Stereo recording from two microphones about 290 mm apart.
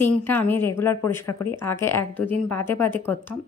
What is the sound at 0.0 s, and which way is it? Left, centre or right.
Speech, centre.